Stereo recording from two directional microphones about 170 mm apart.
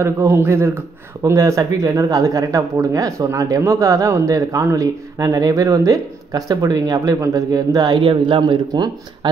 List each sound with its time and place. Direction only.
0.0 s a man's voice: 15° right (ahead or behind)